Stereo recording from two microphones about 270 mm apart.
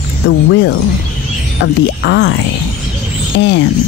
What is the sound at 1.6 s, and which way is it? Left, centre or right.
Speech, left.